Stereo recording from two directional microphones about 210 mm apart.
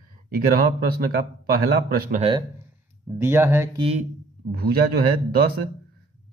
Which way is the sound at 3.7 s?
25° right (ahead or behind).